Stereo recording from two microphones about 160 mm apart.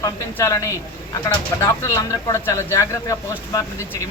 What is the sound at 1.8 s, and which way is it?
Speech, 20° left (ahead or behind).